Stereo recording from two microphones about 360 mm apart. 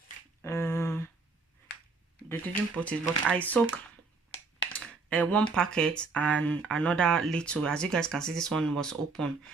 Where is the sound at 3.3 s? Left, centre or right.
Centre.